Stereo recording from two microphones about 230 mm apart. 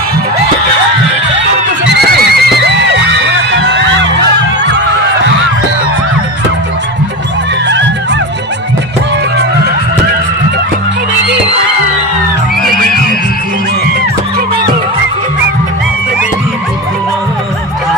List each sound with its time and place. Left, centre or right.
2.3 s music: right